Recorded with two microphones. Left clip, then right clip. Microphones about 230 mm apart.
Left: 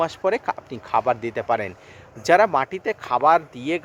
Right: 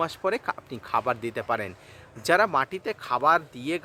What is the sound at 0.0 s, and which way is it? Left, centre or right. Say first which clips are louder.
Speech: left 5 dB; centre.